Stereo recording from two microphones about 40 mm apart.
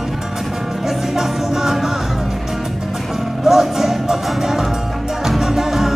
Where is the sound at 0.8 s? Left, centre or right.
Centre.